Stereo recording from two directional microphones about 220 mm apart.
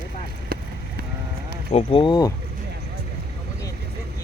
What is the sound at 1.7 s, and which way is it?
Speech, 25° left (ahead or behind).